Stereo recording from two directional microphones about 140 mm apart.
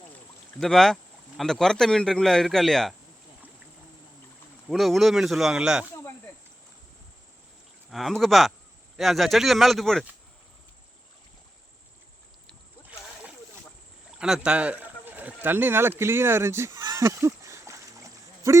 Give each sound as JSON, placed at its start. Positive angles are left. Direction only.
{"t": 0.6, "sound": "a man's voice", "side_deg": 0}
{"t": 4.7, "sound": "a man's voice", "side_deg": 0}
{"t": 7.9, "sound": "a man's voice", "side_deg": 0}
{"t": 14.2, "sound": "a sound", "side_deg": -5}